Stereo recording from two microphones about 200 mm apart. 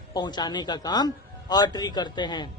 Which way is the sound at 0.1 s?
20° left (ahead or behind).